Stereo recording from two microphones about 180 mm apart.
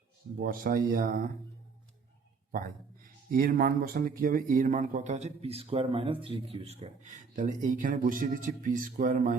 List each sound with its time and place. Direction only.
0.3 s speech: 55° right (ahead or behind)
2.5 s speech: 50° right (ahead or behind)